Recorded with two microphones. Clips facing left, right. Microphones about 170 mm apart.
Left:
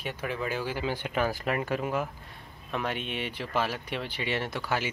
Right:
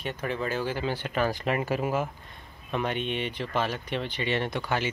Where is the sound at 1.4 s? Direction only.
5° right (ahead or behind).